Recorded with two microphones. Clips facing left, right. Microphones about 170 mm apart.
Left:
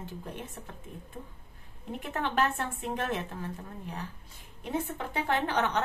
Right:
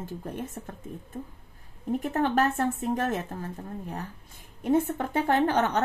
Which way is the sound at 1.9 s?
45° right (ahead or behind).